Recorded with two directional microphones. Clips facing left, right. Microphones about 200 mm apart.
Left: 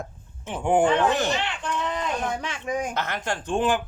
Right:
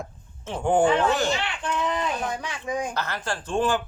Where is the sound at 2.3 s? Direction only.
25° left (ahead or behind).